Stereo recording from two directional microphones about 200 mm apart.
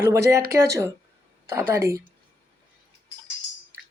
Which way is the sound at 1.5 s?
15° right (ahead or behind).